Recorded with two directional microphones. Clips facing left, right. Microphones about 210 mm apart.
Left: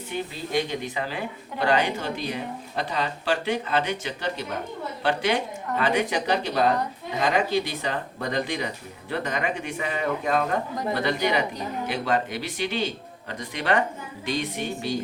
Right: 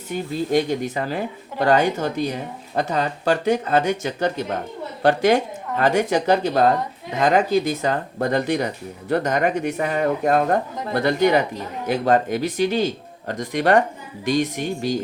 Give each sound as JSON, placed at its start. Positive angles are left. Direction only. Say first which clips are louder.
{"t": 0.1, "sound": "speech", "louder": "right 7 dB", "side_deg": -45}